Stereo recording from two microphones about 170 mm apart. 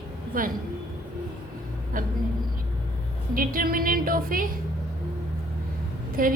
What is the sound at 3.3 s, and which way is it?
A woman's voice, 55° right (ahead or behind).